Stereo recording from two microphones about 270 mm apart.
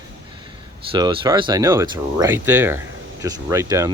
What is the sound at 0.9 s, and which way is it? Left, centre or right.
Speech, centre.